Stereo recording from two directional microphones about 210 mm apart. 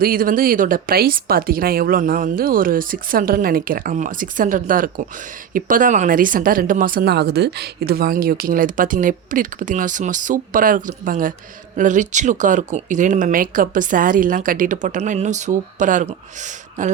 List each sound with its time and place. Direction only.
0.0 s speech: 45° right (ahead or behind)